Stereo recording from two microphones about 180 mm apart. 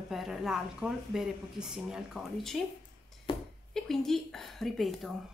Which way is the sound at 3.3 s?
30° left (ahead or behind).